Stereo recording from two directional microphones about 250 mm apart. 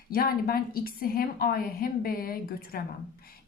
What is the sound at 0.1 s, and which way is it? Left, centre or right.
A woman's voice, left.